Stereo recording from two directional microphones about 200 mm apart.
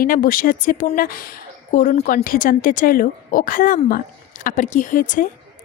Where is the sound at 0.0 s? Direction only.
45° left (ahead or behind).